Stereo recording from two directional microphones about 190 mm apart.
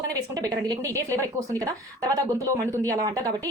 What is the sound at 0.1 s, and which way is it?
A woman's voice, 20° right (ahead or behind).